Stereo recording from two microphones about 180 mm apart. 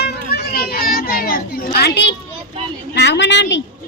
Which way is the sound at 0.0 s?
65° left (ahead or behind).